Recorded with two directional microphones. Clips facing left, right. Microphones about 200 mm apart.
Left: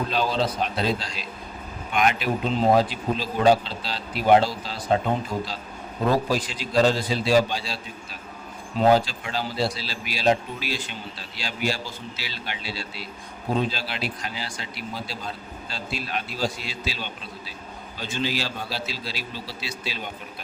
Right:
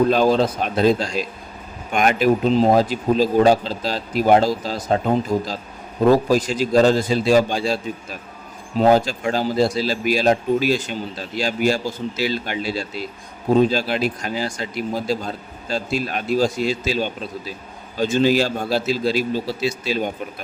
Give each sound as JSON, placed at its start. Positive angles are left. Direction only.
{"t": 0.1, "sound": "speech", "side_deg": -50}
{"t": 6.1, "sound": "speech", "side_deg": -45}